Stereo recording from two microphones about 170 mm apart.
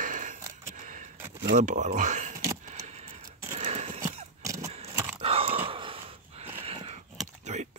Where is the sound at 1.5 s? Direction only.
45° right (ahead or behind).